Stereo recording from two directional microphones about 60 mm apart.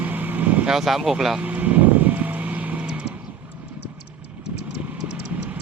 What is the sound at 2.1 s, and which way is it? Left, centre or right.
Vehicle, right.